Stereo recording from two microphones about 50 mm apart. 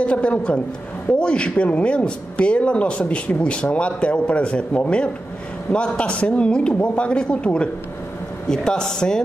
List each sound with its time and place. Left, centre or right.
0.0 s a woman's voice: left